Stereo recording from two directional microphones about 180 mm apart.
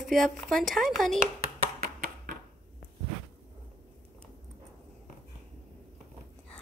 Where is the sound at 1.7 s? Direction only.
50° right (ahead or behind).